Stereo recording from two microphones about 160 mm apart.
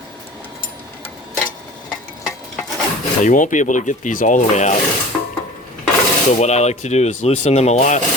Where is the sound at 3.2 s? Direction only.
55° left (ahead or behind).